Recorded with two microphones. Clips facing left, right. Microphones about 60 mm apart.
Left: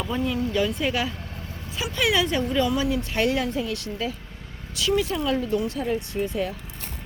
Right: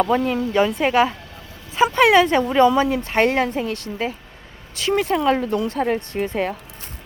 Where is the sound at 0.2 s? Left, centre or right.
Right.